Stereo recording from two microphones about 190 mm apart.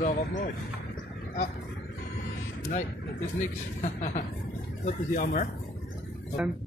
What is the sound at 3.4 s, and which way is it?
Speech, 40° left (ahead or behind).